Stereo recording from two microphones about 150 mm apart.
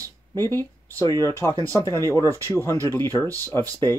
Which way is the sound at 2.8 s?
15° left (ahead or behind).